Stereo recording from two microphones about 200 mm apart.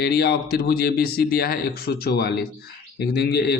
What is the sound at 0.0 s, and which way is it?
A man's voice, 50° left (ahead or behind).